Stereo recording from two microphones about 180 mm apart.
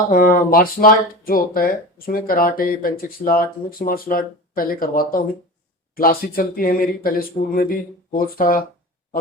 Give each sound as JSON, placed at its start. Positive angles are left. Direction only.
{"t": 0.1, "sound": "speech", "side_deg": 50}